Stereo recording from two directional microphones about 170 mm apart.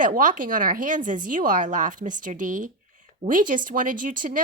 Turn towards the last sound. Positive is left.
turn(degrees=-50)  # may be behind; listen again after turning